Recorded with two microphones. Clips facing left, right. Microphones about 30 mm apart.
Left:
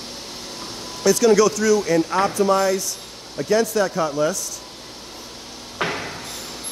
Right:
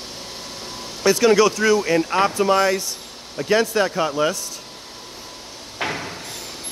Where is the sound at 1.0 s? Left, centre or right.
Right.